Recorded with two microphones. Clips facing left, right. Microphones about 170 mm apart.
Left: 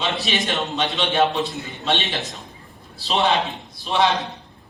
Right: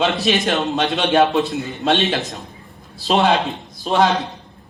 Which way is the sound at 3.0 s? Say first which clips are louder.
Right 4 dB; 40° right (ahead or behind).